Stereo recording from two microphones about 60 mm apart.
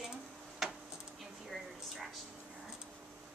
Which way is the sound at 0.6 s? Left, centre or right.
Centre.